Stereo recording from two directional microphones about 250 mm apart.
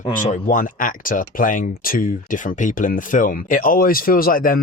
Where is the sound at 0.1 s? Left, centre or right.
Left.